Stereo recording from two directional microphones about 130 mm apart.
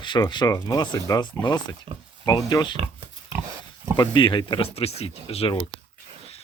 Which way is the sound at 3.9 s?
35° left (ahead or behind).